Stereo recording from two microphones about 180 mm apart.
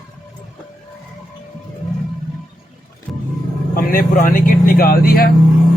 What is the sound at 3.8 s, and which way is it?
Speech, 50° left (ahead or behind).